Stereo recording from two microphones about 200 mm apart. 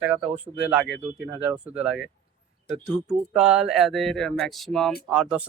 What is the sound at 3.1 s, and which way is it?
Speech, 5° right (ahead or behind).